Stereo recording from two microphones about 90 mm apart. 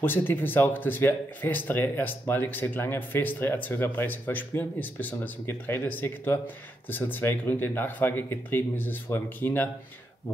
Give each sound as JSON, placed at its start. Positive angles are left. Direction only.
{"t": 0.0, "sound": "speech", "side_deg": 20}